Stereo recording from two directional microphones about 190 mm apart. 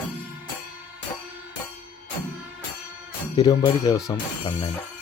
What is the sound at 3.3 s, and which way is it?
Speech, 20° left (ahead or behind).